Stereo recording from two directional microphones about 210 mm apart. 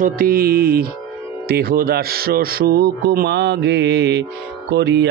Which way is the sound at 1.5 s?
45° right (ahead or behind).